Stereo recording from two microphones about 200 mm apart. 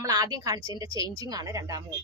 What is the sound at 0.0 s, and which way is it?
A woman's voice, 20° right (ahead or behind).